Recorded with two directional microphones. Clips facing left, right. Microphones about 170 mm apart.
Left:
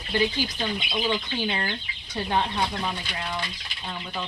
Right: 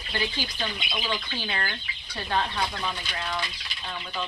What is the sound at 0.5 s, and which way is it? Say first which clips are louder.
Speech: left 4 dB; 25° left (ahead or behind).